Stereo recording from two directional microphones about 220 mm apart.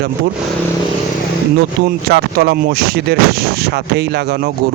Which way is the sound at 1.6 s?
45° right (ahead or behind).